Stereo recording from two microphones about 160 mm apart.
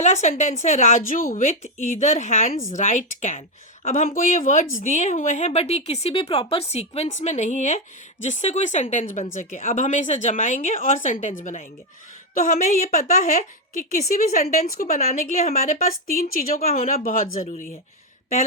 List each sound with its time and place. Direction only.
0.0 s a woman's voice: 45° left (ahead or behind)
16.2 s a woman's voice: 65° left (ahead or behind)